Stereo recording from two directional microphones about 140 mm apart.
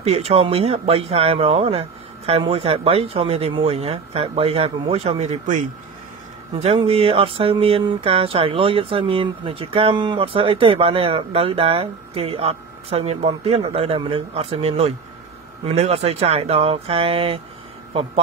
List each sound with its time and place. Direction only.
0.0 s speech: 45° right (ahead or behind)
6.6 s speech: 45° right (ahead or behind)